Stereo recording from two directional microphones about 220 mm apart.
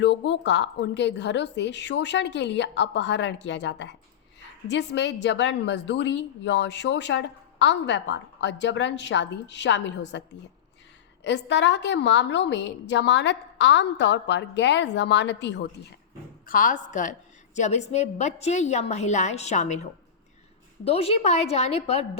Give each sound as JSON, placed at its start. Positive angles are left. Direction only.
{"t": 0.0, "sound": "a woman's voice", "side_deg": 55}
{"t": 16.5, "sound": "a woman's voice", "side_deg": 35}